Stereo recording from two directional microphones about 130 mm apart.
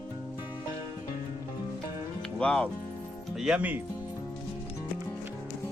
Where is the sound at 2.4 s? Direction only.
5° left (ahead or behind).